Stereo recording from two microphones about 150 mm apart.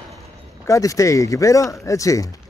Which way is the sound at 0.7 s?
20° left (ahead or behind).